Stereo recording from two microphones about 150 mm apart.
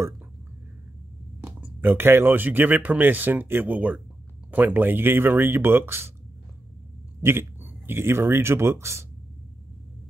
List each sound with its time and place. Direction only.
1.4 s speech: 15° right (ahead or behind)
7.2 s speech: 15° right (ahead or behind)